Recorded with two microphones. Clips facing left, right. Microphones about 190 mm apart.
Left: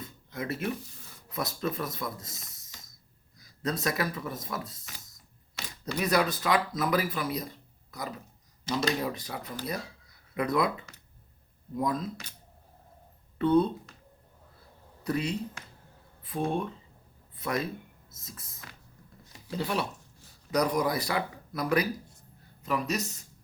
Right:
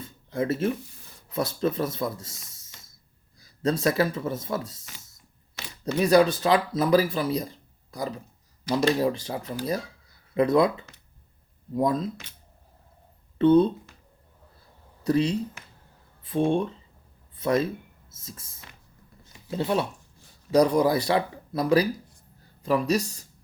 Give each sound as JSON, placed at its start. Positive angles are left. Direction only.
{"t": 0.0, "sound": "a sound", "side_deg": -30}
{"t": 1.3, "sound": "speech", "side_deg": -30}
{"t": 13.4, "sound": "speech", "side_deg": -25}
{"t": 15.0, "sound": "speech", "side_deg": -30}
{"t": 19.5, "sound": "speech", "side_deg": -25}